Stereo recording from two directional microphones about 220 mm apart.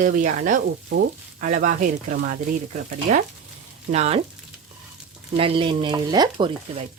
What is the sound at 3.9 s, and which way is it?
Stir, 30° right (ahead or behind).